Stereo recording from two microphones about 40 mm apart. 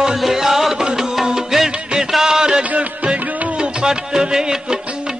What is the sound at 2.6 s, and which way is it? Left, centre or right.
Music, right.